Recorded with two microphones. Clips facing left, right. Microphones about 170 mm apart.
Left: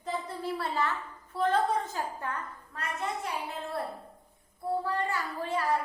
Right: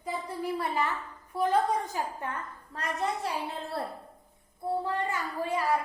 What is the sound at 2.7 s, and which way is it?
Speech, 35° right (ahead or behind).